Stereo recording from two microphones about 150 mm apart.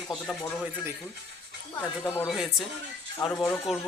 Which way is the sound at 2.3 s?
Centre (ahead or behind).